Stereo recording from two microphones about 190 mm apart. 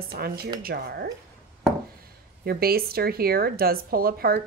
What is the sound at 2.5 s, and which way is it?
Speech, 55° right (ahead or behind).